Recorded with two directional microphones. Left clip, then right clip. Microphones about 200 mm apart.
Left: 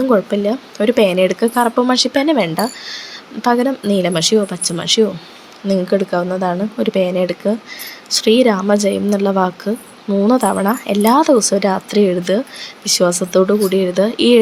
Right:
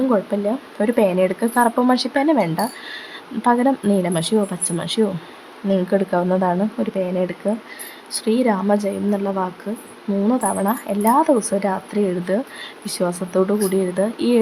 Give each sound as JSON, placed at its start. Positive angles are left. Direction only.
{"t": 0.1, "sound": "a woman's voice", "side_deg": 5}
{"t": 6.8, "sound": "a woman's voice", "side_deg": 10}